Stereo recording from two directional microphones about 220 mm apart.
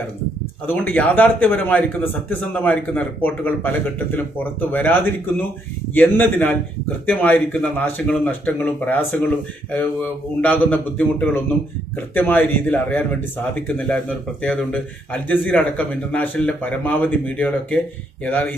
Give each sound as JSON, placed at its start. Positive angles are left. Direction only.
{"t": 0.7, "sound": "speech", "side_deg": 5}